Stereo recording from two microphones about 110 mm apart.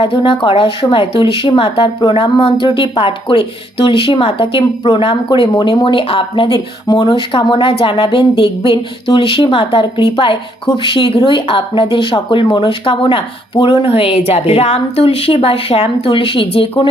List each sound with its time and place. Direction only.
0.0 s speech: 55° left (ahead or behind)